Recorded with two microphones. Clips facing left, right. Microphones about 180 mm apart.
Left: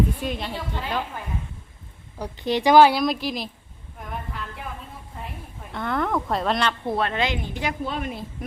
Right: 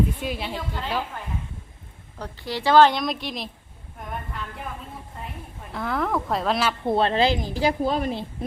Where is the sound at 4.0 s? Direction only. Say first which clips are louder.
Even; centre (ahead or behind).